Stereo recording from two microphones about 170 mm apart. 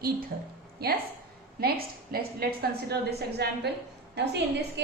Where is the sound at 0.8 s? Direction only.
70° right (ahead or behind).